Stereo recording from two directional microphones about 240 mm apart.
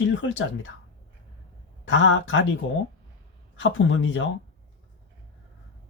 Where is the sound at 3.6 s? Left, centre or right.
Left.